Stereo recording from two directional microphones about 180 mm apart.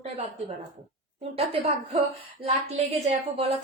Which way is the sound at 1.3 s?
30° right (ahead or behind).